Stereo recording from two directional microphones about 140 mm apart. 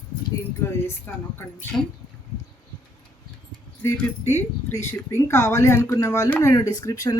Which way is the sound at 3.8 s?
15° left (ahead or behind).